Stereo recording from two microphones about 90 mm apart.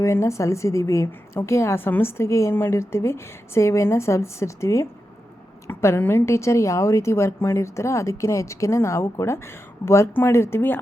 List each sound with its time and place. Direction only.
0.0 s a woman's voice: 30° left (ahead or behind)
5.6 s a sound: 30° left (ahead or behind)
6.0 s a woman's voice: 25° left (ahead or behind)